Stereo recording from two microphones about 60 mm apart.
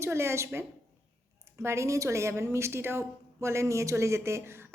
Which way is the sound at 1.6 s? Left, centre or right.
Right.